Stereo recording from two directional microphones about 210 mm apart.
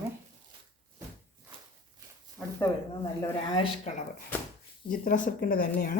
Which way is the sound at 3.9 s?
30° left (ahead or behind).